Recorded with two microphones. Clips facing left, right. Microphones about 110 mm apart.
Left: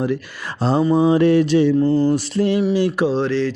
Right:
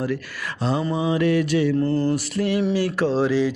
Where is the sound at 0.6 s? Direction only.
35° left (ahead or behind).